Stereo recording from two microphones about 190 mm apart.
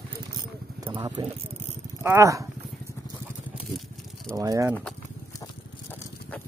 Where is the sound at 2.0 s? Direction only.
15° right (ahead or behind).